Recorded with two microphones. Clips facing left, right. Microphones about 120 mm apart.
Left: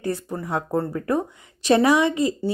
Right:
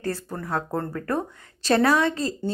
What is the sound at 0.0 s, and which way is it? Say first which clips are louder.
A woman's voice: left 3 dB; 15° left (ahead or behind).